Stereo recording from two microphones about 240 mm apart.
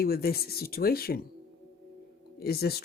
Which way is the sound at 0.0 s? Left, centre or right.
Left.